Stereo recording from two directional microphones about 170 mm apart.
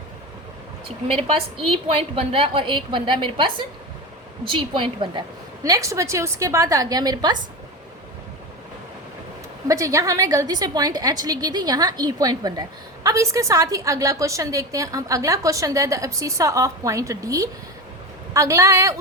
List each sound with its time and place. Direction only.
0.9 s a woman's voice: 35° right (ahead or behind)
9.6 s a woman's voice: 20° right (ahead or behind)